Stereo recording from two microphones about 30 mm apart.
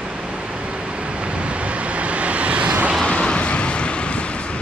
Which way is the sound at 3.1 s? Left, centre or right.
Left.